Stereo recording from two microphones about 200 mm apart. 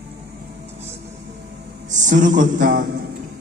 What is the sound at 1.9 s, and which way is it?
Speech, 40° right (ahead or behind).